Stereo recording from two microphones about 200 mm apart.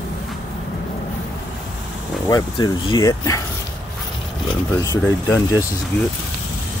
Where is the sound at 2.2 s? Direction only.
20° left (ahead or behind).